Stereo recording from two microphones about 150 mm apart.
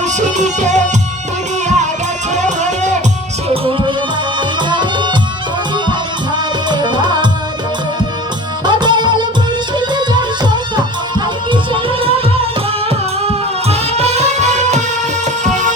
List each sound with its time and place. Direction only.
0.0 s music: 50° right (ahead or behind)
3.5 s music: 35° right (ahead or behind)
6.3 s music: 30° right (ahead or behind)
8.6 s music: 30° right (ahead or behind); by 15.7 s 55° right (ahead or behind)